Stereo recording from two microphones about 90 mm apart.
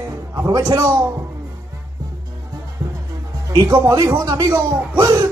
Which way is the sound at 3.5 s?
55° right (ahead or behind).